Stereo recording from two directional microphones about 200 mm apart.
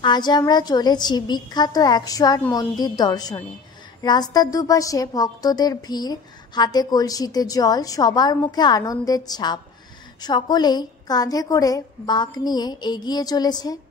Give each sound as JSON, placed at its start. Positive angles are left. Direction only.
{"t": 0.0, "sound": "a woman's voice", "side_deg": 20}